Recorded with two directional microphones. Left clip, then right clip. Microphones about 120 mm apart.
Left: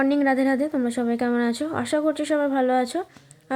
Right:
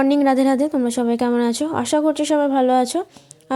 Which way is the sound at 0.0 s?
40° right (ahead or behind).